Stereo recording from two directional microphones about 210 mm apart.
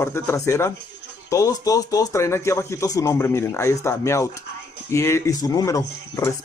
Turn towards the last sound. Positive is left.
turn(degrees=15)  # may be behind; listen again after turning